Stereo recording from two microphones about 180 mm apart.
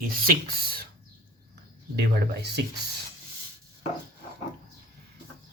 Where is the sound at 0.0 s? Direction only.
50° right (ahead or behind).